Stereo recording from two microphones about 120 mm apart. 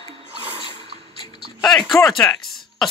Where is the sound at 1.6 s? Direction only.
Centre (ahead or behind).